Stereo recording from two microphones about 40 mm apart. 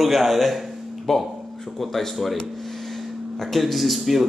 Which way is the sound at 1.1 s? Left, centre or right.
Centre.